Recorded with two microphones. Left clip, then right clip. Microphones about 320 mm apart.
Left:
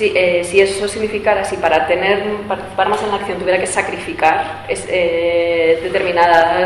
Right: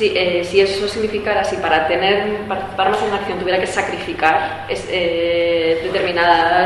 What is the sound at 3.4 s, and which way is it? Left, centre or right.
A woman's voice, centre.